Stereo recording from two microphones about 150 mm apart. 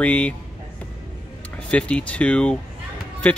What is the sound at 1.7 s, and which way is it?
Speech, 10° left (ahead or behind).